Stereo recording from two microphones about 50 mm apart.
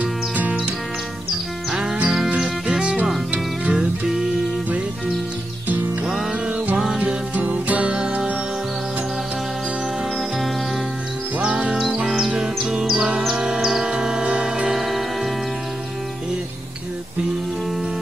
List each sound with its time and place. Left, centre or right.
0.0 s music: right
1.7 s music: centre
2.8 s music: right
6.0 s music: centre
7.3 s music: right
11.4 s music: centre
14.7 s music: centre